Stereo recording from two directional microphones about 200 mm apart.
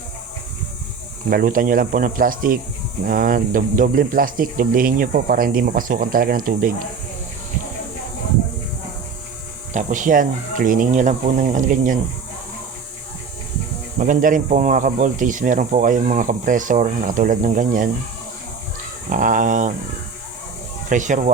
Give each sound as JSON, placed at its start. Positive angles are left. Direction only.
{"t": 1.3, "sound": "speech", "side_deg": -45}
{"t": 9.7, "sound": "speech", "side_deg": -40}
{"t": 14.0, "sound": "speech", "side_deg": -40}
{"t": 19.1, "sound": "speech", "side_deg": -40}
{"t": 20.9, "sound": "speech", "side_deg": -40}